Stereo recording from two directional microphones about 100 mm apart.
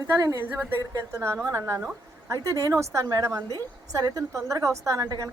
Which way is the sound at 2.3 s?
30° right (ahead or behind).